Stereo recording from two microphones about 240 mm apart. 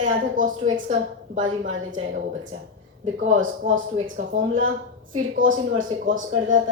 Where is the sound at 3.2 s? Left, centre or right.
Right.